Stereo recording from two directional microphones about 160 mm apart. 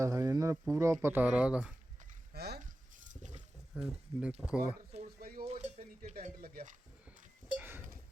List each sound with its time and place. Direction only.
0.0 s a sound: 20° right (ahead or behind)
0.7 s speech: 20° right (ahead or behind)
2.3 s a sound: 90° right
3.1 s a sound: 50° right (ahead or behind)
3.8 s speech: 5° right (ahead or behind)
5.2 s dishes: 65° right (ahead or behind)
5.5 s dishes: 45° right (ahead or behind)
6.4 s speech: 60° right (ahead or behind)
7.5 s livestock: 10° right (ahead or behind)